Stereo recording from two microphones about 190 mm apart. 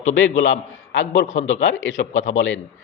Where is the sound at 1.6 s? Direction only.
80° left.